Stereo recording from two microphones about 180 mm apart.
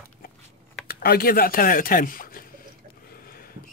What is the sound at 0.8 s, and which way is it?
Speech, 60° left (ahead or behind).